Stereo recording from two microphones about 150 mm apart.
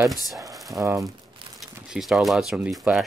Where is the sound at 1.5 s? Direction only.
Centre (ahead or behind).